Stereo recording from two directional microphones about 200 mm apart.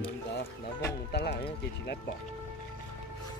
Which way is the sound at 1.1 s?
60° left (ahead or behind).